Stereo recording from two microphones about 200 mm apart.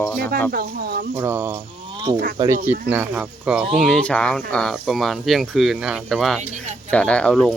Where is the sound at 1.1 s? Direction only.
10° right (ahead or behind).